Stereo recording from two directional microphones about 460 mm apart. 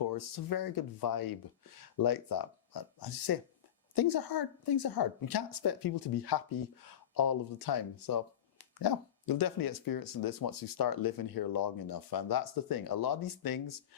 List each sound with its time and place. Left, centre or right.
0.0 s speech: left